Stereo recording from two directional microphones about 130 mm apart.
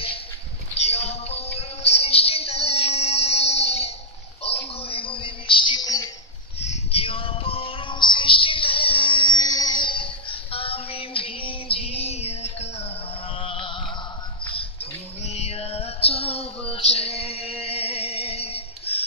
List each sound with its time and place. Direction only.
0.7 s music: 55° left (ahead or behind)
4.4 s a sound: 50° left (ahead or behind); by 6.0 s 30° left (ahead or behind)
6.6 s music: 55° left (ahead or behind)
13.4 s music: 45° left (ahead or behind)
15.2 s music: 55° left (ahead or behind)